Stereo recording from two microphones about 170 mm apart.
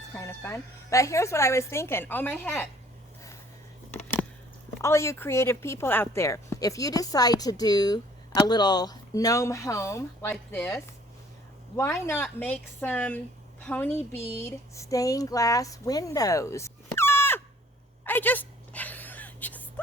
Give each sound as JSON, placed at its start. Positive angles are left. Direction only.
{"t": 0.2, "sound": "a woman's voice", "side_deg": 15}
{"t": 4.8, "sound": "speech", "side_deg": 15}
{"t": 11.8, "sound": "a woman's voice", "side_deg": 15}
{"t": 18.0, "sound": "a sound", "side_deg": 10}